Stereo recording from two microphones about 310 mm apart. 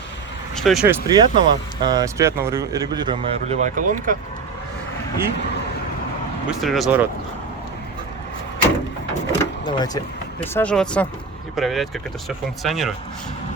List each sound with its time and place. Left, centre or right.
0.6 s speech: centre
1.0 s speech: centre
3.8 s speech: right
6.6 s speech: centre
9.4 s vehicle: centre
10.4 s speech: centre